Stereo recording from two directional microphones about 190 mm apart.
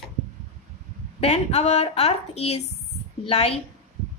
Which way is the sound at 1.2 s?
35° left (ahead or behind).